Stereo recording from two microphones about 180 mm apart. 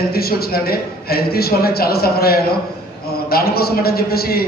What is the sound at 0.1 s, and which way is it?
A man's voice, 60° left (ahead or behind).